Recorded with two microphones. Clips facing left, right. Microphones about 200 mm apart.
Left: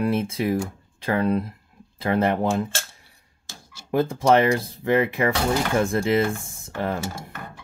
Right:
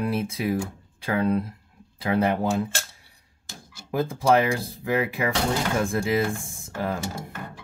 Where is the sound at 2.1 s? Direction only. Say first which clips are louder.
Left 2 dB; 5° right (ahead or behind).